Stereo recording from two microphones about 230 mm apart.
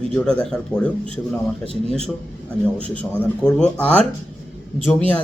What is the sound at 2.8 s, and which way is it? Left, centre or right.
A man's voice, centre.